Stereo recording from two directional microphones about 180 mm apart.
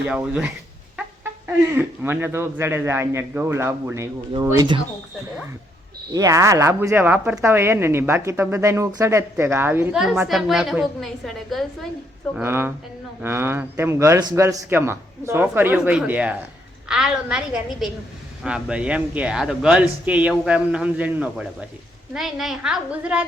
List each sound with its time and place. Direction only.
0.1 s speech: 5° right (ahead or behind)
1.7 s speech: 10° right (ahead or behind)
6.1 s speech: 20° right (ahead or behind); by 11.6 s centre (ahead or behind)
12.3 s speech: 10° right (ahead or behind)